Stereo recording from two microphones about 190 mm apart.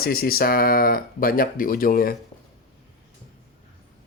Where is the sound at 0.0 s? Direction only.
50° left (ahead or behind).